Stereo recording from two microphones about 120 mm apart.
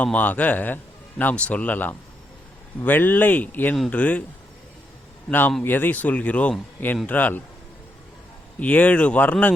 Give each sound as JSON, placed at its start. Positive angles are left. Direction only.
{"t": 0.0, "sound": "speech", "side_deg": 15}
{"t": 5.3, "sound": "speech", "side_deg": 15}
{"t": 8.6, "sound": "speech", "side_deg": 10}